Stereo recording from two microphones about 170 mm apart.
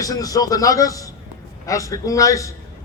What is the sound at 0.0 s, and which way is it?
A man's voice, 20° left (ahead or behind).